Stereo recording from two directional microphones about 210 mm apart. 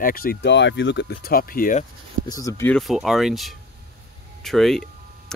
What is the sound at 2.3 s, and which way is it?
Speech, 15° left (ahead or behind).